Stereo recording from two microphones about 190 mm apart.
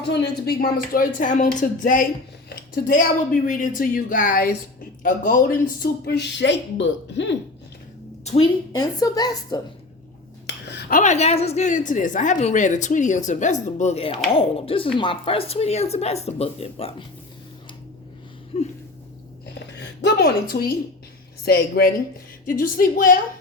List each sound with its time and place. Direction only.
0.1 s a woman's voice: 55° left (ahead or behind)
8.2 s a woman's voice: 35° left (ahead or behind)
8.7 s a woman's voice: 20° left (ahead or behind)
10.4 s speech: 60° left (ahead or behind); by 16.9 s 30° left (ahead or behind)
18.5 s a sound: 30° left (ahead or behind)
20.0 s a woman's voice: 60° left (ahead or behind)